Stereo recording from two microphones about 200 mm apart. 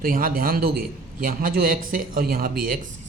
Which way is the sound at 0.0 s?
45° right (ahead or behind).